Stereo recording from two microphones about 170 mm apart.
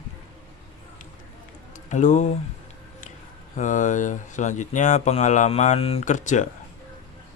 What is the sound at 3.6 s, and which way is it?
Speech, 45° left (ahead or behind).